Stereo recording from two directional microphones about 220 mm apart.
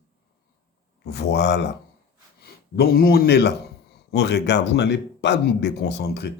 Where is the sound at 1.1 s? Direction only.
50° left (ahead or behind).